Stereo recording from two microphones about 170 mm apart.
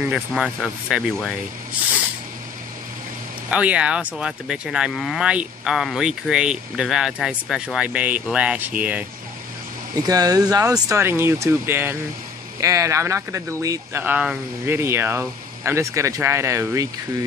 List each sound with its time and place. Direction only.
0.1 s moo: centre (ahead or behind)
3.4 s moo: 10° right (ahead or behind)
10.0 s speech: 20° right (ahead or behind)